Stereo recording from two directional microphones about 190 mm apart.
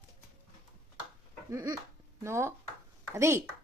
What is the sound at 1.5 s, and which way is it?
Speech, 20° right (ahead or behind).